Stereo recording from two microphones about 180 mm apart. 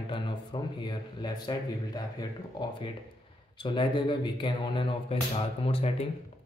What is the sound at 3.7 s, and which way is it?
Speech, 25° left (ahead or behind).